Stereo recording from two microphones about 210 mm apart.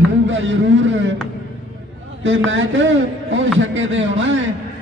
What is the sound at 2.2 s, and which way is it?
A man's voice, 65° right (ahead or behind).